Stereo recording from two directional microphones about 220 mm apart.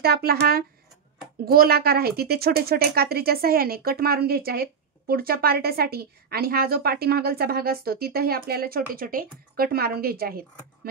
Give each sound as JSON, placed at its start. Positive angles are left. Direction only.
{"t": 0.0, "sound": "speech", "side_deg": -45}